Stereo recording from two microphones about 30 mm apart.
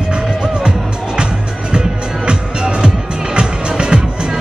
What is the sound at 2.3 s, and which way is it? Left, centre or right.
Music, right.